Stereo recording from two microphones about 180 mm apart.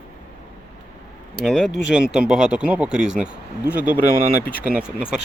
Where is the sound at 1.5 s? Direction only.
Centre (ahead or behind).